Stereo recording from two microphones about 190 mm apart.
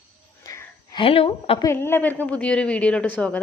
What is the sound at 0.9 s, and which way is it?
Speech, 30° left (ahead or behind).